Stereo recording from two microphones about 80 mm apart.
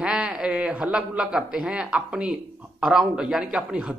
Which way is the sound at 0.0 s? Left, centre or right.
Centre.